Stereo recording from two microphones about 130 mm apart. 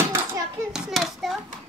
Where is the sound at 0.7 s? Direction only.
Centre (ahead or behind).